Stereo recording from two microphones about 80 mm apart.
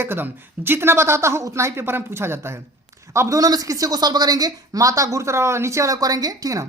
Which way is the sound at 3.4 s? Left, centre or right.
Right.